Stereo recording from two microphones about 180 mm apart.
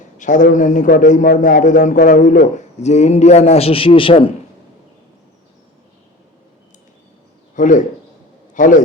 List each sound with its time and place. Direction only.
0.2 s a man's voice: 45° left (ahead or behind); by 4.3 s 30° left (ahead or behind)
7.5 s a man's voice: 45° left (ahead or behind)